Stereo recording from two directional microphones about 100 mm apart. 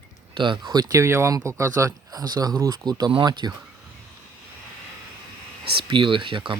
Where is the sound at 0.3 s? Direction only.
50° right (ahead or behind).